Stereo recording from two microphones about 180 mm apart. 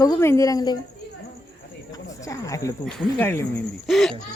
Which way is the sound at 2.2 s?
20° left (ahead or behind).